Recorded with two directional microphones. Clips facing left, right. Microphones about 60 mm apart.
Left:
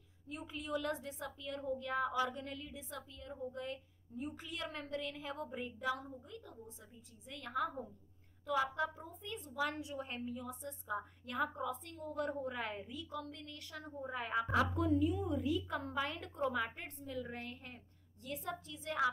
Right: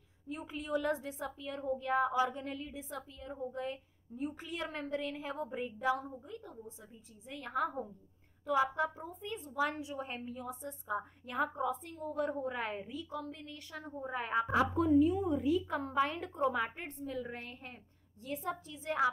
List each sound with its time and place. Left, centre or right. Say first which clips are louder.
0.3 s a woman's voice: right 4 dB; centre
6.3 s a woman's voice: right 4 dB; right